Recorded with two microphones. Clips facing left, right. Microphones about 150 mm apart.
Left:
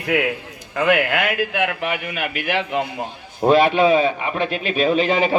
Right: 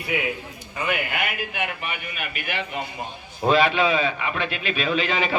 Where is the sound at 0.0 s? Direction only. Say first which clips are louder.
Left 6 dB; 85° left.